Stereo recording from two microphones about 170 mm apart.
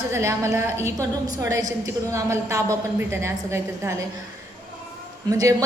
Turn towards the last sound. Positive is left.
turn(degrees=-20)  # may be behind; listen again after turning